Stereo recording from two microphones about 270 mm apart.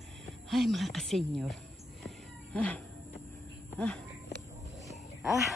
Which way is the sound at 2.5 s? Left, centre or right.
Centre.